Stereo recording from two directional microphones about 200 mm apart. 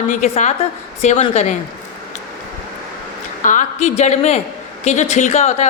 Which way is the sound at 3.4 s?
40° left (ahead or behind).